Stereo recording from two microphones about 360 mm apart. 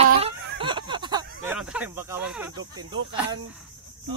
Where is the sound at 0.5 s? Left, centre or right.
Centre.